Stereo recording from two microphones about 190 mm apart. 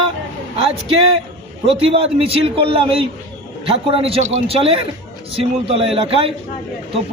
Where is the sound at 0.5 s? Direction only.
30° right (ahead or behind).